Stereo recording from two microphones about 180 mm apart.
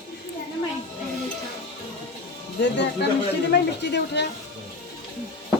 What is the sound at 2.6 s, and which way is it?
Speech, 75° left (ahead or behind).